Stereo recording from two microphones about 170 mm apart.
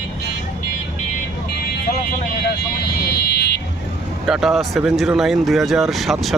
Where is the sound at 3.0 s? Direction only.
70° left (ahead or behind).